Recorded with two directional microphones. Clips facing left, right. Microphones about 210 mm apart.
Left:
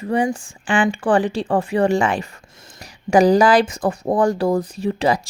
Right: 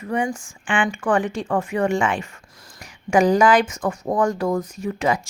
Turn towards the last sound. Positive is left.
turn(degrees=35)  # may be behind; listen again after turning